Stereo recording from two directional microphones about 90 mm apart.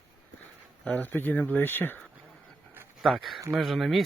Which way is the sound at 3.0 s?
Centre (ahead or behind).